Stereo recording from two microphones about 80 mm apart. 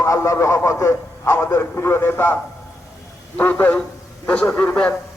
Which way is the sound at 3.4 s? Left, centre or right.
Left.